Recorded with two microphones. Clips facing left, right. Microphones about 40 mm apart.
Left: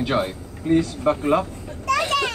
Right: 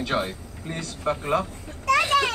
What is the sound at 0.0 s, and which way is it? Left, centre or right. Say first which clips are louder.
Speech: left 4 dB; centre.